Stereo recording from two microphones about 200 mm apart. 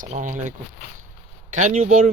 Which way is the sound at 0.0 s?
40° right (ahead or behind).